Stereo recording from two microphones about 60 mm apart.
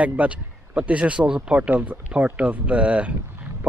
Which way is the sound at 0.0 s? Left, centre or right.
Right.